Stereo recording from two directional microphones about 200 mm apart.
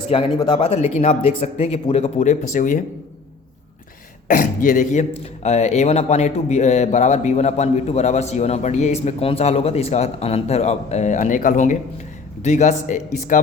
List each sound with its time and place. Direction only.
0.1 s speech: 25° left (ahead or behind); by 2.8 s 40° left (ahead or behind)
4.3 s speech: 45° left (ahead or behind)